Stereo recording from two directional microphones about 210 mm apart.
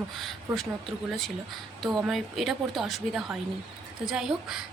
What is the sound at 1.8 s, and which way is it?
Speech, centre (ahead or behind).